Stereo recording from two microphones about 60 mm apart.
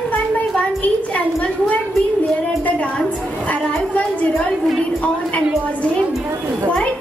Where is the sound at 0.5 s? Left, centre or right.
Left.